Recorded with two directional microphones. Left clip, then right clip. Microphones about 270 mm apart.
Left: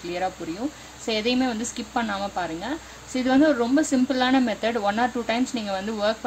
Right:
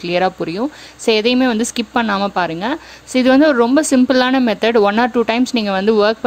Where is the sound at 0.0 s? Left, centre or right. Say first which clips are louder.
Right 11 dB; right.